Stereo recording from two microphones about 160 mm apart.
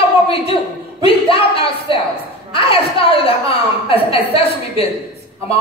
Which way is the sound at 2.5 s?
35° left (ahead or behind).